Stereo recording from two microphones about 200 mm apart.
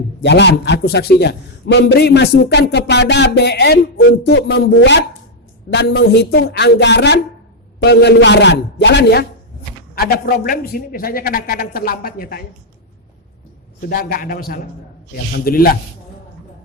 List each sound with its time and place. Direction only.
0.2 s a man's voice: 60° left (ahead or behind)
13.8 s a man's voice: 50° left (ahead or behind)